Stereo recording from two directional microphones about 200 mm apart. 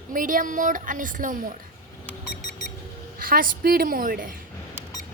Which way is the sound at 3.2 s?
45° right (ahead or behind).